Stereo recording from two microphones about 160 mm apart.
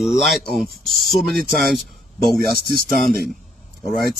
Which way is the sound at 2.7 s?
70° right (ahead or behind).